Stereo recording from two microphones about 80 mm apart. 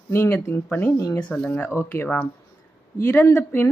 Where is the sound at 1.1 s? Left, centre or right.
Centre.